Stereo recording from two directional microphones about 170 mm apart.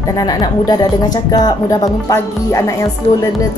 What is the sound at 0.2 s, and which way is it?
Speech, 25° left (ahead or behind).